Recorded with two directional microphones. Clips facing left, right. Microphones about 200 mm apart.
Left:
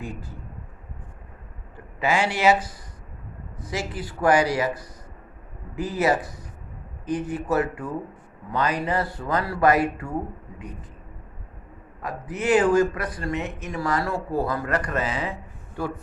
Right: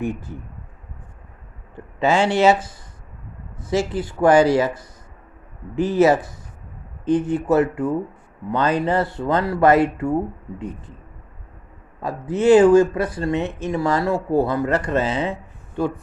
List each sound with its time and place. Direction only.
0.0 s speech: 20° right (ahead or behind)
1.7 s speech: 25° right (ahead or behind)
12.0 s speech: 25° right (ahead or behind)